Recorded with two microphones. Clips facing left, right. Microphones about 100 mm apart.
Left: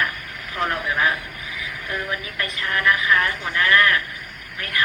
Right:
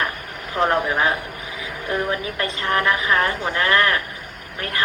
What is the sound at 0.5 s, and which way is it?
Speech, 30° right (ahead or behind).